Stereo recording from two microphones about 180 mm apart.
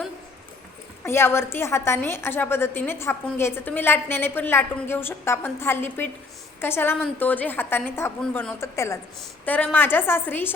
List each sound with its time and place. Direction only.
1.0 s a woman's voice: 15° left (ahead or behind)